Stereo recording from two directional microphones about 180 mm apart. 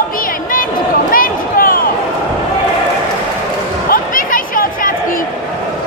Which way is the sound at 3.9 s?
50° left (ahead or behind).